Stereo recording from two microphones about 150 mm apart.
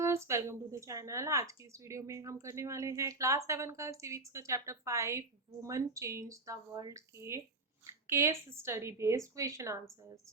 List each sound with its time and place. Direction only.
0.0 s speech: 20° right (ahead or behind)